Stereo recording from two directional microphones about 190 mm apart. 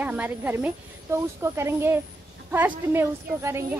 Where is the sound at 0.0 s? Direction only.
10° right (ahead or behind).